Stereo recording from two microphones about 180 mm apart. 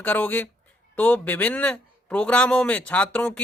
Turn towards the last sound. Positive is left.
turn(degrees=5)  # may be behind; listen again after turning